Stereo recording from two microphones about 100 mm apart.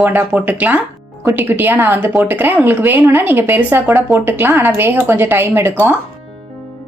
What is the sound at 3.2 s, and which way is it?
A woman's voice, 20° right (ahead or behind).